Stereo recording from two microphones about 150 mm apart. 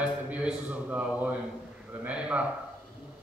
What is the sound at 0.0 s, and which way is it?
A man's voice, 10° right (ahead or behind).